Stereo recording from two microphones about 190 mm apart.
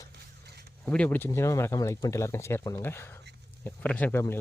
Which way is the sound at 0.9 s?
5° left (ahead or behind).